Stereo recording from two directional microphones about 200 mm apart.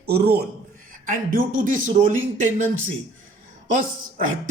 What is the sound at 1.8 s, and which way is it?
Speech, 40° right (ahead or behind).